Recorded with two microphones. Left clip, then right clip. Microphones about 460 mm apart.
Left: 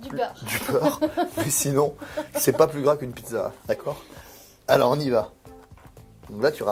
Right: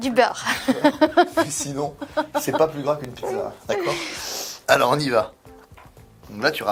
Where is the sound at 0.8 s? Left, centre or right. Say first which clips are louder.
Right 6 dB; right.